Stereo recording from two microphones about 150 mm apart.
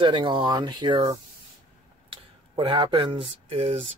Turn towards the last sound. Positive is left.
turn(degrees=-40)  # may be behind; listen again after turning